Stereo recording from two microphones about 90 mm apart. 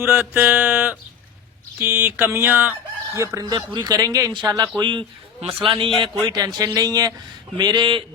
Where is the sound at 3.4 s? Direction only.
50° right (ahead or behind).